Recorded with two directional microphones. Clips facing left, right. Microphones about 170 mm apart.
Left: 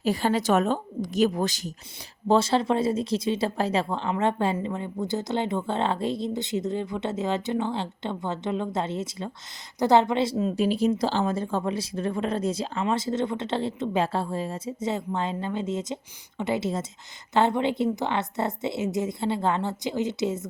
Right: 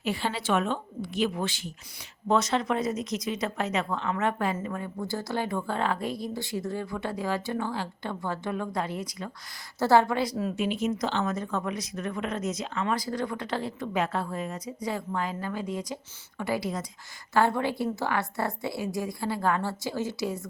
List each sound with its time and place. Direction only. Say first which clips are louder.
0.0 s a woman's voice: left 6 dB; 40° left (ahead or behind)
2.2 s speech: left 4 dB; 30° left (ahead or behind)
10.5 s speech: left 5 dB; 35° left (ahead or behind)